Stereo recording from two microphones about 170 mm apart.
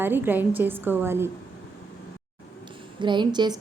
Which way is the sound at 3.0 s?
25° right (ahead or behind).